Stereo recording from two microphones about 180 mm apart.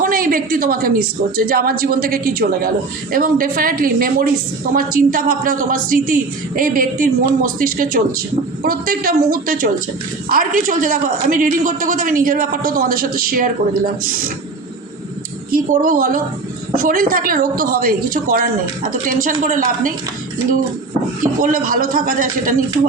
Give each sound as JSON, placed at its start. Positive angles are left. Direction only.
{"t": 0.0, "sound": "a man's voice", "side_deg": -50}
{"t": 15.5, "sound": "a man's voice", "side_deg": -50}
{"t": 21.4, "sound": "a man's voice", "side_deg": -50}